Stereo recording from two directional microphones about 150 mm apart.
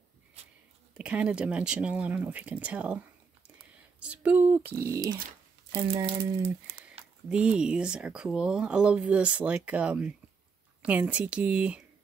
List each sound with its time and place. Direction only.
0.4 s a sound: 45° right (ahead or behind)
0.9 s speech: 5° right (ahead or behind)
5.7 s speech: 35° right (ahead or behind)
7.2 s speech: 5° right (ahead or behind)